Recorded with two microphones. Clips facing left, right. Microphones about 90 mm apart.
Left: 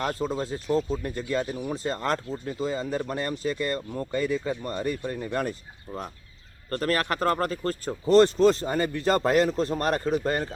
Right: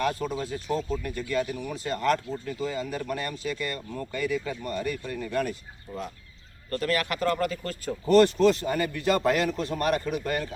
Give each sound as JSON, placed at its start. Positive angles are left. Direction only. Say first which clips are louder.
{"t": 0.0, "sound": "speech", "louder": "even", "side_deg": 30}
{"t": 6.7, "sound": "speech", "louder": "left 1 dB", "side_deg": 40}